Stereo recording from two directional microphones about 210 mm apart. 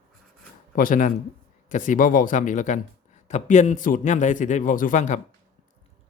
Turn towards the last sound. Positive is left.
turn(degrees=35)  # may be behind; listen again after turning